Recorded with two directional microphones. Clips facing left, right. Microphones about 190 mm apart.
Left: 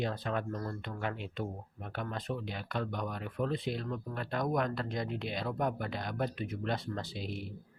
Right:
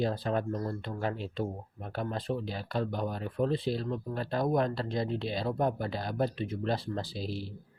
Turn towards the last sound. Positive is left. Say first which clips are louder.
# right 3 dB
turn(degrees=-30)  # may be behind; listen again after turning